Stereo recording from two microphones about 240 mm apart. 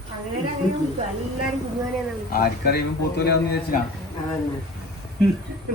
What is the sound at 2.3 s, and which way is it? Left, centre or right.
A man's voice, left.